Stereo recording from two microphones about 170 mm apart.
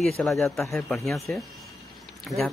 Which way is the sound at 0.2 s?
Centre (ahead or behind).